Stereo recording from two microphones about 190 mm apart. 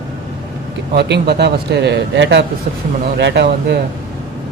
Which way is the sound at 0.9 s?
60° right (ahead or behind).